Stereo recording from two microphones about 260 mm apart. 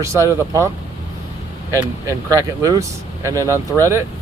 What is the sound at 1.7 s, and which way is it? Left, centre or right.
Speech, centre.